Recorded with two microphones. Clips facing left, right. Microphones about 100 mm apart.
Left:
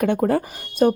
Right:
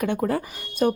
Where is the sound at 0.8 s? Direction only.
40° left (ahead or behind).